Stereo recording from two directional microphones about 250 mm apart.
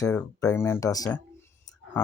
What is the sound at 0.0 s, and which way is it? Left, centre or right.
Speech, centre.